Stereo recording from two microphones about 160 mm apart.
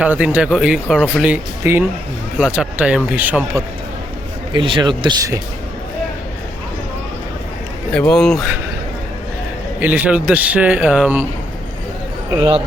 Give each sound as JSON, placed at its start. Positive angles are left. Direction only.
{"t": 0.0, "sound": "speech", "side_deg": -10}
{"t": 1.6, "sound": "speech", "side_deg": -20}
{"t": 4.5, "sound": "speech", "side_deg": -30}
{"t": 7.9, "sound": "speech", "side_deg": 5}
{"t": 9.8, "sound": "speech", "side_deg": -10}